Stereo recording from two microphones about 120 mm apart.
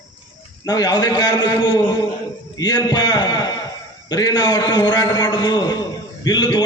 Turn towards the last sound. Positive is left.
turn(degrees=35)  # may be behind; listen again after turning